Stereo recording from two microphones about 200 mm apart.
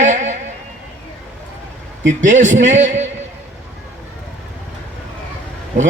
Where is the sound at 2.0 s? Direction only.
40° right (ahead or behind).